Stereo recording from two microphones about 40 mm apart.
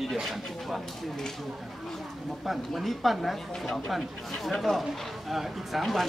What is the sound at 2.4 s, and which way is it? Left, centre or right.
Speech, centre.